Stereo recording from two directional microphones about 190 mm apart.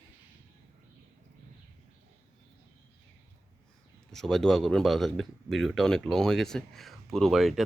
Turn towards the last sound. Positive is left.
turn(degrees=0)  # may be behind; listen again after turning